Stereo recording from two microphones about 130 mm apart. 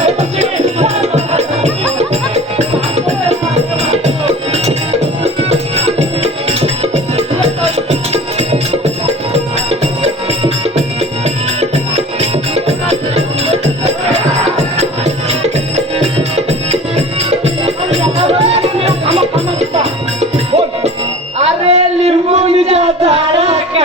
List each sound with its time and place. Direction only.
0.0 s music: 55° right (ahead or behind)
3.9 s music: 55° right (ahead or behind)
21.3 s a sound: 55° right (ahead or behind)